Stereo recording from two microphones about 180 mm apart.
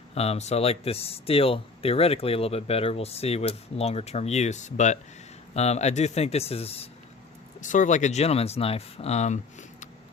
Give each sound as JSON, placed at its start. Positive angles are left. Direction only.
{"t": 0.1, "sound": "speech", "side_deg": 35}
{"t": 7.6, "sound": "speech", "side_deg": 45}